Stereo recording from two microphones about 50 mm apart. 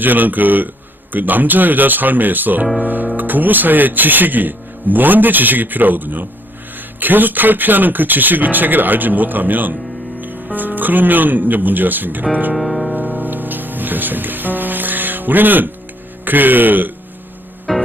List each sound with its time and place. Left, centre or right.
0.0 s speech: right
2.8 s music: right
3.2 s speech: right
12.5 s music: centre
12.9 s music: right
16.2 s speech: right
17.7 s music: centre